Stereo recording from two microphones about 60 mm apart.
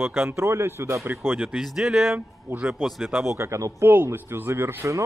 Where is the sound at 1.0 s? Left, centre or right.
Right.